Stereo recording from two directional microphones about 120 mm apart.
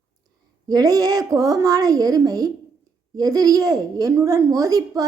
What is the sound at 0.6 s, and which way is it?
A woman's voice, 30° right (ahead or behind).